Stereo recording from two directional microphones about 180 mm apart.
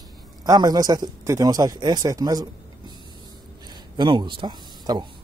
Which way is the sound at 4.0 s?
25° right (ahead or behind).